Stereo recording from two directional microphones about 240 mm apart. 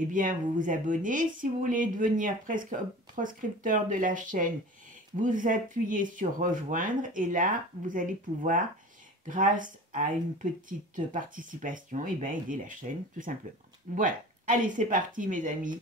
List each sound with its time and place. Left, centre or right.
0.1 s speech: right